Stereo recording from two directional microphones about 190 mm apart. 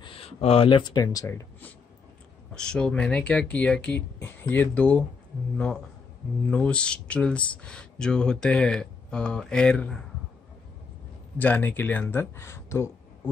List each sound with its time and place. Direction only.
0.0 s speech: 30° left (ahead or behind); by 5.0 s 5° left (ahead or behind)
6.4 s speech: 5° left (ahead or behind)
11.3 s speech: 10° left (ahead or behind)